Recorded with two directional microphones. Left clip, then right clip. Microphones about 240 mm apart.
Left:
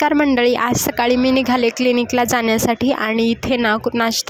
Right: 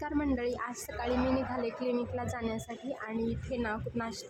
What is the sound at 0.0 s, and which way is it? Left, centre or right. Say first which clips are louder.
Speech: left 18 dB; left.